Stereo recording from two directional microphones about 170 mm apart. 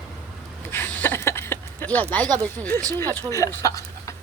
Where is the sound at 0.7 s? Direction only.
10° left (ahead or behind).